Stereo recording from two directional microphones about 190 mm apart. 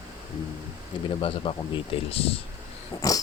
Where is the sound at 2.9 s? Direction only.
20° left (ahead or behind).